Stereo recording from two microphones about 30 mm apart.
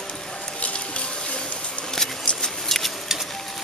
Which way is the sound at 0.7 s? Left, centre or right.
Left.